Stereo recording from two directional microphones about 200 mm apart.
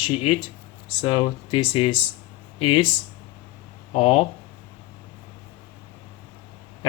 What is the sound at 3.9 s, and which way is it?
Speech, 30° left (ahead or behind).